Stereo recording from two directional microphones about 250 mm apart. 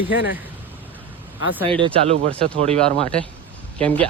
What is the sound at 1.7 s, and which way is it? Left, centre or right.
Speech, right.